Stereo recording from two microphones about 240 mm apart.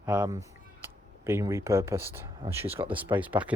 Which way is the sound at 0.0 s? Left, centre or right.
Centre.